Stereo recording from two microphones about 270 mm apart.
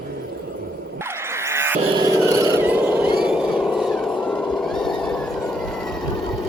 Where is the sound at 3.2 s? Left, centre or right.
Centre.